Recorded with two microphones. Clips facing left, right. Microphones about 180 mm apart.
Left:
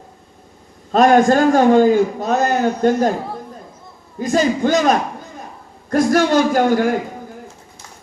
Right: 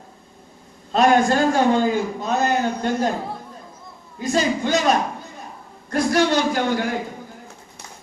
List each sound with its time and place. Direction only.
0.9 s a man's voice: 45° left (ahead or behind)
4.2 s a man's voice: 45° left (ahead or behind)